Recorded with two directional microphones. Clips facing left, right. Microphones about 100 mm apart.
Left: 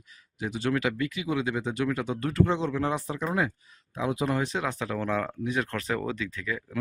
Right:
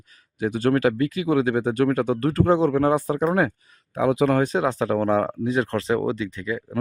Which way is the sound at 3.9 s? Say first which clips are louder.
Right 8 dB; 65° right (ahead or behind).